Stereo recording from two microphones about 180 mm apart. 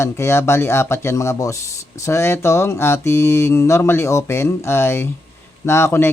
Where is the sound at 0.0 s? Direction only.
15° left (ahead or behind).